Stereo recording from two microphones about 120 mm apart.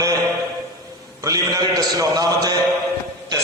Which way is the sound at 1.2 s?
30° right (ahead or behind).